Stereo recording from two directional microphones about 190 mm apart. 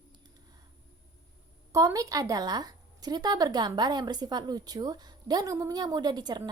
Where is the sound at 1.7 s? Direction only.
15° right (ahead or behind).